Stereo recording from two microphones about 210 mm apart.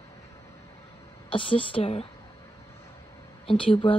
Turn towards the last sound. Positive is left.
turn(degrees=25)  # may be behind; listen again after turning